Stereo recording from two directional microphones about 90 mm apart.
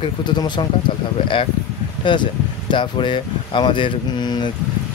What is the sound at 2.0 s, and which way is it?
Speech, 60° left (ahead or behind).